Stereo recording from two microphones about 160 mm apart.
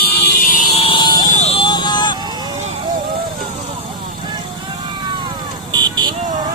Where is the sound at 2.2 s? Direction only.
25° right (ahead or behind).